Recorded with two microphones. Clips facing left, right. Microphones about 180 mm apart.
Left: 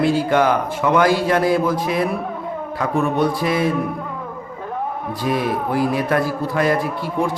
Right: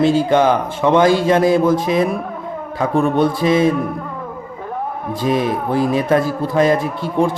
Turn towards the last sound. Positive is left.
turn(degrees=-25)  # may be behind; listen again after turning